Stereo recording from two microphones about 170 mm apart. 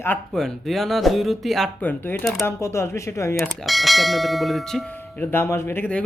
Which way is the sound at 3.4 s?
Centre (ahead or behind).